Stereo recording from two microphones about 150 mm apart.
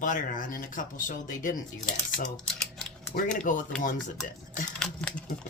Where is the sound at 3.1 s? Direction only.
60° left (ahead or behind).